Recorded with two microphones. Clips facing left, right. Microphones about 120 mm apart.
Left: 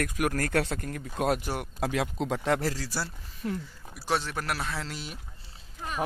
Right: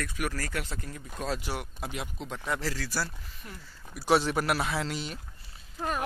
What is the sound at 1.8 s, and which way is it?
Speech, 90° left.